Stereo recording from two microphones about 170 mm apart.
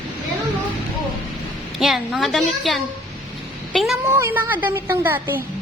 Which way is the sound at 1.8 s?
Centre (ahead or behind).